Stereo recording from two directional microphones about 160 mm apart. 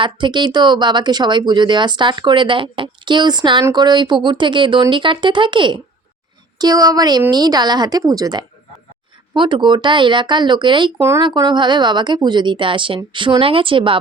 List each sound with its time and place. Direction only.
0.0 s speech: 30° right (ahead or behind)